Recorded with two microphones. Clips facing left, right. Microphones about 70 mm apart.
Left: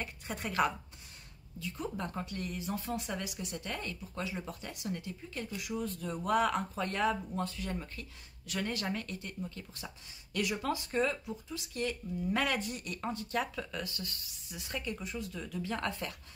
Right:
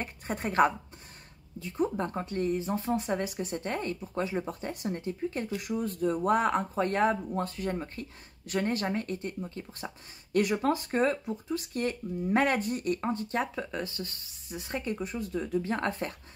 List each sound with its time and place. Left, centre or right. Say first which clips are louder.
0.0 s a woman's voice: right 6 dB; right